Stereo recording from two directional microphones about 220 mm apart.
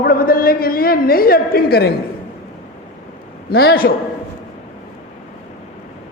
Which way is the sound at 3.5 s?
45° left (ahead or behind).